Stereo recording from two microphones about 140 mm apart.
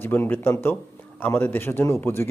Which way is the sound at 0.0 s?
15° left (ahead or behind).